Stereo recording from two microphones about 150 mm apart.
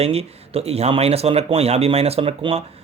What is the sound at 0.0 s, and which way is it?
Speech, 40° right (ahead or behind).